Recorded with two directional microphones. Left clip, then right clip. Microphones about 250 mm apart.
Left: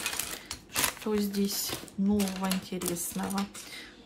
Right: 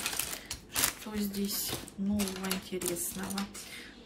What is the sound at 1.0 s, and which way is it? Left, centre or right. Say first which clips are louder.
Speech: left 7 dB; centre.